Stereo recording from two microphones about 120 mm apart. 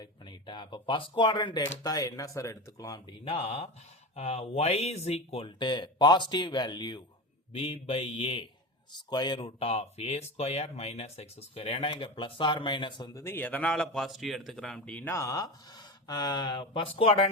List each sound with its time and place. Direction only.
0.0 s speech: 40° left (ahead or behind)
3.2 s speech: 50° left (ahead or behind)
7.5 s speech: 55° left (ahead or behind)
9.0 s speech: 35° left (ahead or behind)
13.1 s a man's voice: 20° left (ahead or behind)
15.1 s speech: 25° left (ahead or behind); by 17.2 s 50° left (ahead or behind)